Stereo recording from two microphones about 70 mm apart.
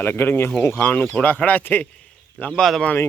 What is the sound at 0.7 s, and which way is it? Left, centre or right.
Speech, left.